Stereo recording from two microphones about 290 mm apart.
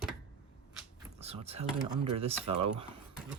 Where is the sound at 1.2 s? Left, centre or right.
Right.